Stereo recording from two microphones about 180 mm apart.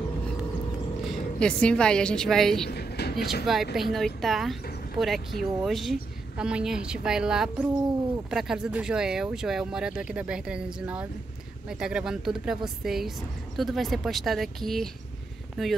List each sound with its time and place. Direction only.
1.0 s a woman's voice: 5° left (ahead or behind)
2.7 s a sound: 60° left (ahead or behind)
3.7 s speech: centre (ahead or behind)